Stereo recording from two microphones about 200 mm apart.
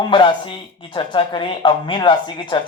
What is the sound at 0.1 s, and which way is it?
Speech, 25° left (ahead or behind).